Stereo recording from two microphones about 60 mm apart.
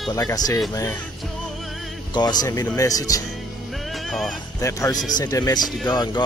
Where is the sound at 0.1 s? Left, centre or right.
Left.